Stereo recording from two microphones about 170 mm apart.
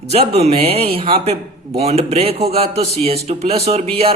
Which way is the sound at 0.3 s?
35° right (ahead or behind).